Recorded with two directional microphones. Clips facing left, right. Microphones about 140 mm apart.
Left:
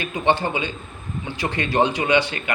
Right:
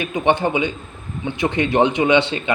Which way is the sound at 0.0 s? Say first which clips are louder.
Right 3 dB; 20° right (ahead or behind).